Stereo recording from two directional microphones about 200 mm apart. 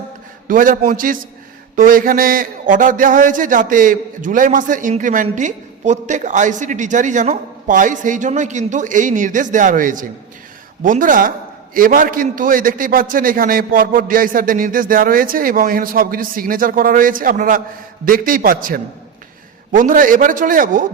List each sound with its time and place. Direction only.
0.4 s a man's voice: 40° right (ahead or behind)